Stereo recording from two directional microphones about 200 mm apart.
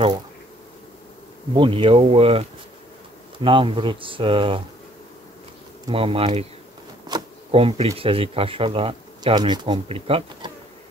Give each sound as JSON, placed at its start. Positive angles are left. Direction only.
{"t": 1.5, "sound": "speech", "side_deg": -25}
{"t": 3.4, "sound": "speech", "side_deg": -25}
{"t": 5.9, "sound": "speech", "side_deg": -30}